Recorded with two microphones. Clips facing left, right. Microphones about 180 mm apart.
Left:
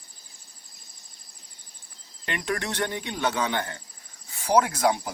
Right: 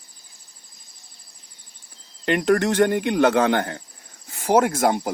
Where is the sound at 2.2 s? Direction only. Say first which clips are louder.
Right 11 dB; 55° right (ahead or behind).